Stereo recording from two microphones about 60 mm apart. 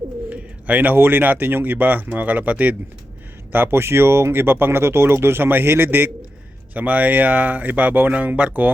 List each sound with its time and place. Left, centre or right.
0.3 s bird: right
0.9 s speech: right
3.5 s speech: right
6.7 s speech: right